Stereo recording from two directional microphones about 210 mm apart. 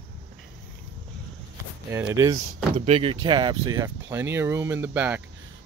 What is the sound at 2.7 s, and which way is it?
Speech, 30° right (ahead or behind).